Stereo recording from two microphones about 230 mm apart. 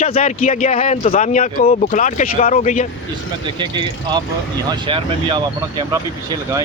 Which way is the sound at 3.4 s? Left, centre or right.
Centre.